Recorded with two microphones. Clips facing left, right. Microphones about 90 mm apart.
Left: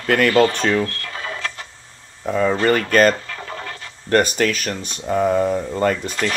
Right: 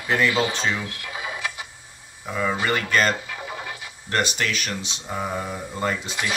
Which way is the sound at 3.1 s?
15° right (ahead or behind).